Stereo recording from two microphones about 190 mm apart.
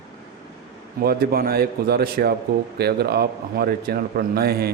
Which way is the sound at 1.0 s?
55° right (ahead or behind).